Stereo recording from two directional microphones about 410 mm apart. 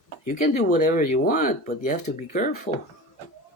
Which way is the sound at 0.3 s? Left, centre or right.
Centre.